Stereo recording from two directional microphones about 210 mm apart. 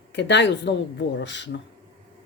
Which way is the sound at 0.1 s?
55° left (ahead or behind).